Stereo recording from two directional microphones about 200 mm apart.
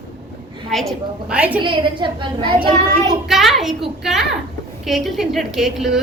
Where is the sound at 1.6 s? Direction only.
25° right (ahead or behind).